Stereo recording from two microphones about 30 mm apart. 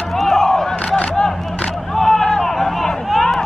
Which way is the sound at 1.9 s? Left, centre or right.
Centre.